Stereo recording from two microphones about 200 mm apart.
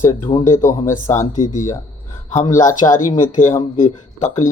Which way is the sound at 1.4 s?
40° left (ahead or behind).